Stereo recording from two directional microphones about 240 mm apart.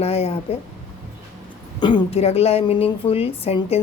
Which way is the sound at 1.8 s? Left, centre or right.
Centre.